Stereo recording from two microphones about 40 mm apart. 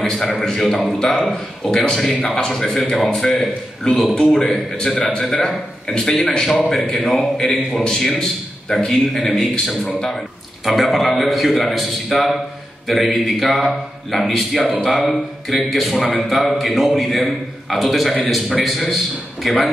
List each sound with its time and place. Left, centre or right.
0.0 s a man's voice: centre
2.5 s a man's voice: centre